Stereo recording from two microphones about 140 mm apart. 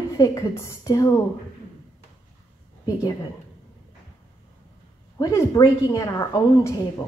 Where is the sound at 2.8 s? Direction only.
25° left (ahead or behind).